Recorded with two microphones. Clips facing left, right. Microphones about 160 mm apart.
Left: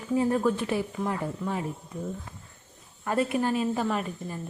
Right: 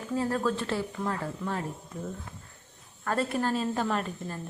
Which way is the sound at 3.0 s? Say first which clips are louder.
Left 2 dB; 10° left (ahead or behind).